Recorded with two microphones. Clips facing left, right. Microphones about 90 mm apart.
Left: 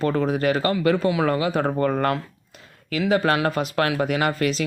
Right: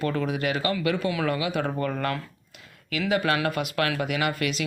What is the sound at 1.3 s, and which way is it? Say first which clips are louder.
Speech: left 5 dB; 35° left (ahead or behind).